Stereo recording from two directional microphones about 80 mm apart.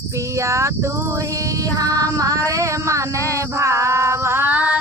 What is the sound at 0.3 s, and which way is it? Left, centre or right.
Child singing, right.